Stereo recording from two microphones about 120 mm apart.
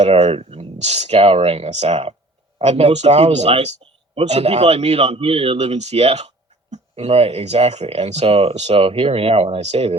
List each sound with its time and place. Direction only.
0.0 s speech: 60° right (ahead or behind)